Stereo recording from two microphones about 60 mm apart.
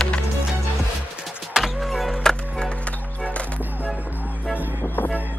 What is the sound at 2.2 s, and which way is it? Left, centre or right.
Music, centre.